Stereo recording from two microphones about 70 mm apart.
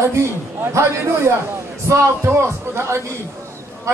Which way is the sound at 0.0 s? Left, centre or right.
Right.